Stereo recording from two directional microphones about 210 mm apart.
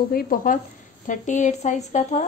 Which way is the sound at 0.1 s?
45° left (ahead or behind).